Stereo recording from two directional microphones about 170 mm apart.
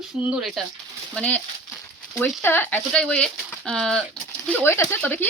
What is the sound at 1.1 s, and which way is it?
Speech, 10° left (ahead or behind).